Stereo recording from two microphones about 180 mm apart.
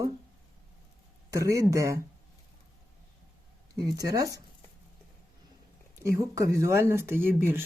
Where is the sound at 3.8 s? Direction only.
20° right (ahead or behind).